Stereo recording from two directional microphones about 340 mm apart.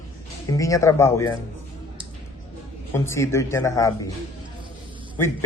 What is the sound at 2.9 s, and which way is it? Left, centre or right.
Speech, centre.